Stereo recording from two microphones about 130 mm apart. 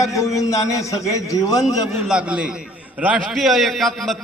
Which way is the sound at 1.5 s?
5° right (ahead or behind).